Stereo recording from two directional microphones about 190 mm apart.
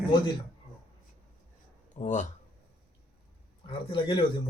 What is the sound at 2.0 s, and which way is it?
Speech, 40° left (ahead or behind).